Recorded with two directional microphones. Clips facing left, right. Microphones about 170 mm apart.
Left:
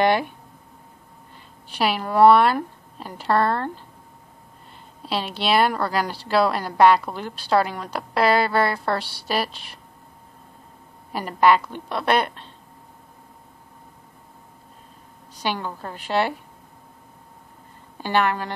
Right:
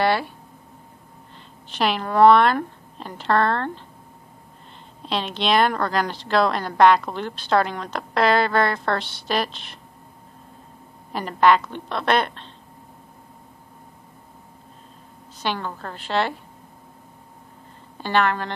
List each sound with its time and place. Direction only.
0.0 s speech: 15° left (ahead or behind)
1.7 s a woman's voice: 10° left (ahead or behind)
5.0 s a woman's voice: 10° left (ahead or behind)
11.1 s a woman's voice: 10° left (ahead or behind)
15.4 s a woman's voice: 10° left (ahead or behind)
18.0 s a woman's voice: 10° left (ahead or behind)